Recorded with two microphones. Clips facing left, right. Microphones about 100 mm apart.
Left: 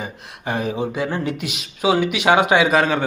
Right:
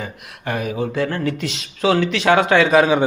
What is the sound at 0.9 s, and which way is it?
Speech, 15° left (ahead or behind).